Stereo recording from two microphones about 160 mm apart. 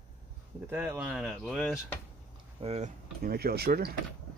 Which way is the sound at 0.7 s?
10° right (ahead or behind).